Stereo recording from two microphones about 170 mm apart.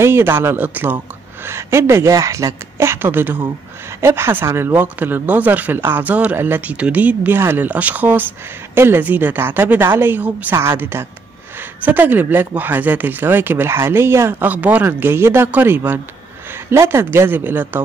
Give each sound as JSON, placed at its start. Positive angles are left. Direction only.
{"t": 0.0, "sound": "speech", "side_deg": -15}